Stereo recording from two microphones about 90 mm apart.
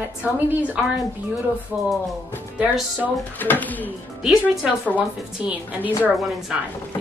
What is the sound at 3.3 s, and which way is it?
Speech, 20° left (ahead or behind).